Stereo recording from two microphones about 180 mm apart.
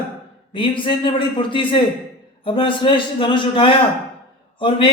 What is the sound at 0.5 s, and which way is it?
A man's voice, 30° left (ahead or behind).